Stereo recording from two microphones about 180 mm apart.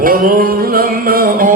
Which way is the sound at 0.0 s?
55° right (ahead or behind).